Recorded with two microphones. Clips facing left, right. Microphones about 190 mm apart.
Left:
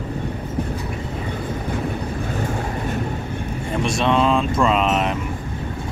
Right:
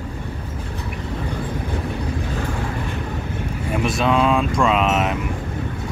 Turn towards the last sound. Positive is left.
turn(degrees=-5)  # may be behind; listen again after turning